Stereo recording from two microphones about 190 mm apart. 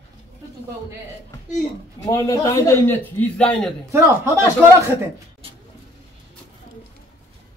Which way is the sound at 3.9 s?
15° right (ahead or behind).